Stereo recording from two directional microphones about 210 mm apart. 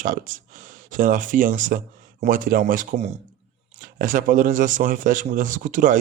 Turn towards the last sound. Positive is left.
turn(degrees=-40)  # may be behind; listen again after turning